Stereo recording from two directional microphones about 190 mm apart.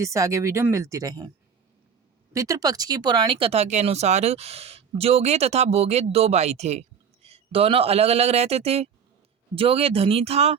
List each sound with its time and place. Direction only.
0.0 s speech: 15° right (ahead or behind)
2.3 s speech: 15° right (ahead or behind); by 10.6 s 30° right (ahead or behind)